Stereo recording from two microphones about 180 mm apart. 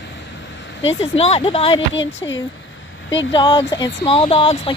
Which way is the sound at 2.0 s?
90° left.